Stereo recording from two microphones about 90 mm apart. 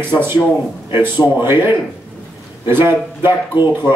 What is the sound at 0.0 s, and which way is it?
Speech, 25° right (ahead or behind).